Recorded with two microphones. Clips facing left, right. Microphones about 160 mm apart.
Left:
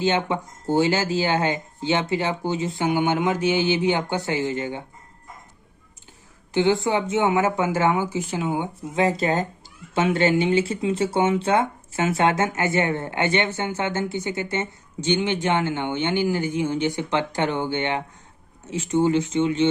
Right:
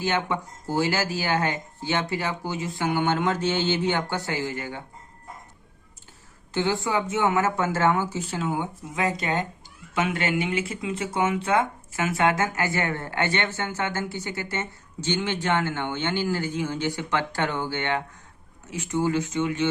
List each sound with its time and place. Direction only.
0.0 s speech: 25° left (ahead or behind)
6.5 s speech: 20° left (ahead or behind)